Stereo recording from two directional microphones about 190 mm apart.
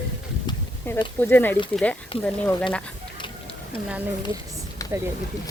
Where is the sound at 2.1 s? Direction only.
30° left (ahead or behind).